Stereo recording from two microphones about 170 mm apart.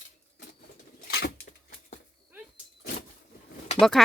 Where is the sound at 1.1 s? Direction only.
70° left (ahead or behind).